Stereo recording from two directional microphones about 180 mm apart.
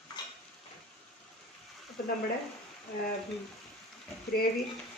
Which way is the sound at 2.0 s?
55° left (ahead or behind).